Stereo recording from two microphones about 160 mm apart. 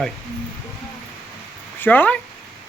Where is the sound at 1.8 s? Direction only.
10° left (ahead or behind).